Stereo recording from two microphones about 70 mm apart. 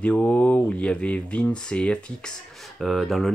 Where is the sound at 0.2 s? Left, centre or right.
Left.